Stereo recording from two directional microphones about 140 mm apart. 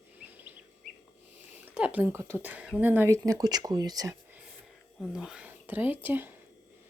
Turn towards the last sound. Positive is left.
turn(degrees=-15)  # may be behind; listen again after turning